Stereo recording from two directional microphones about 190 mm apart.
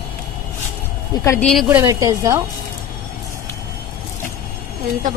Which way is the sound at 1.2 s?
15° left (ahead or behind).